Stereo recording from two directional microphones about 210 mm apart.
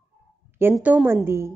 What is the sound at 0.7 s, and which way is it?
Speech, 5° right (ahead or behind).